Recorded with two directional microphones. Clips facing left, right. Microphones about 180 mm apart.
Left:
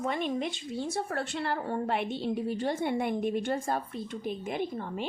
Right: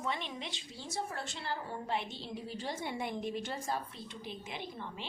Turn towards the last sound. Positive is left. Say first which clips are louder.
# left 10 dB
turn(degrees=50)  # may be behind; listen again after turning